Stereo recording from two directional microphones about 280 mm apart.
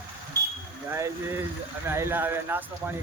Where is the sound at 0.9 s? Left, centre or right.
Centre.